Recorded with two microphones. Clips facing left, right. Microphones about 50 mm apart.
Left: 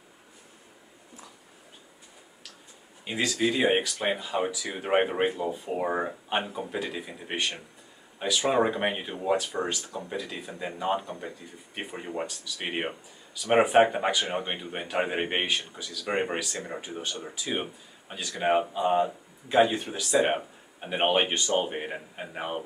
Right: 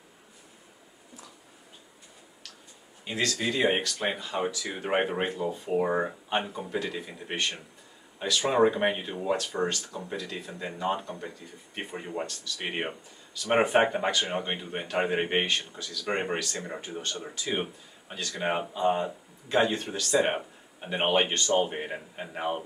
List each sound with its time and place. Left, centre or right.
3.1 s a man's voice: centre